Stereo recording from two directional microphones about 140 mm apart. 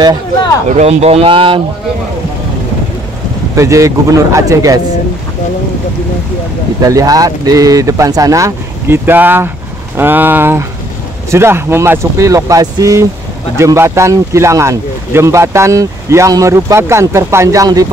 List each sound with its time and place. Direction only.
0.7 s speech: 50° right (ahead or behind)
3.5 s speech: 20° right (ahead or behind)
6.8 s speech: 25° right (ahead or behind)